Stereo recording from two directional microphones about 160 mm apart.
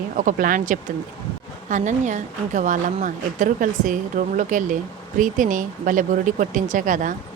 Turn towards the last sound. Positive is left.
turn(degrees=-55)  # may be behind; listen again after turning